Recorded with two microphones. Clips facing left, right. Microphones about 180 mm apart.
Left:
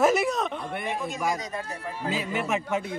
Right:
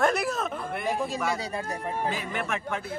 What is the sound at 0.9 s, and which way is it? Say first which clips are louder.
Speech: right 1 dB; 35° right (ahead or behind).